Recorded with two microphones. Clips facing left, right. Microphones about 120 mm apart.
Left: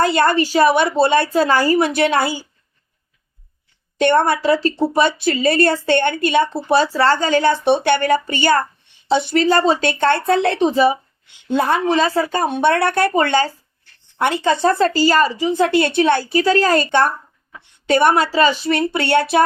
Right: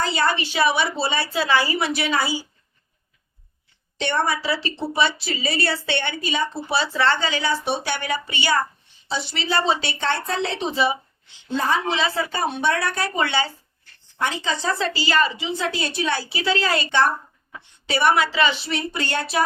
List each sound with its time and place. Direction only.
0.0 s speech: 55° left (ahead or behind)
3.9 s speech: 55° left (ahead or behind)
11.3 s speech: 65° left (ahead or behind)
14.2 s speech: 65° left (ahead or behind)